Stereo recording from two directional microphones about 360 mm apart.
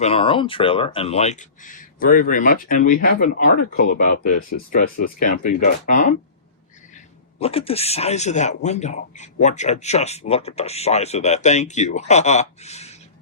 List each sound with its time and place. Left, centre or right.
0.0 s speech: centre
7.3 s speech: centre